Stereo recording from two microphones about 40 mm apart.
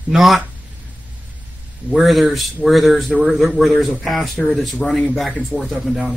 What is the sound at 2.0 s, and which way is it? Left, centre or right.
Speech, centre.